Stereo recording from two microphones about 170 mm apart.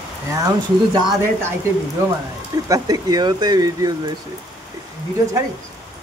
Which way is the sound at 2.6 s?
20° right (ahead or behind).